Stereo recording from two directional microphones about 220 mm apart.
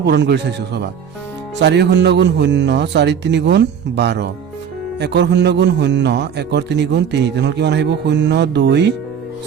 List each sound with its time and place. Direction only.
0.0 s a man's voice: 50° right (ahead or behind)